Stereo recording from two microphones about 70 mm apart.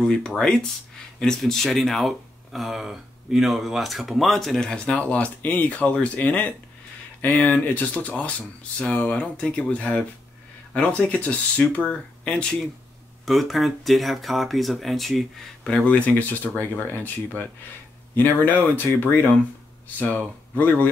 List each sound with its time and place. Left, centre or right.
0.1 s speech: centre
4.6 s speech: centre
13.2 s speech: centre
15.7 s speech: left
20.0 s speech: left